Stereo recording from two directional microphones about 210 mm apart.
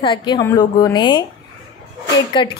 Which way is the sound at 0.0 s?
20° left (ahead or behind).